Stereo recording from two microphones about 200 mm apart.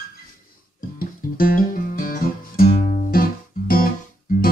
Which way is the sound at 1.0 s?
45° left (ahead or behind).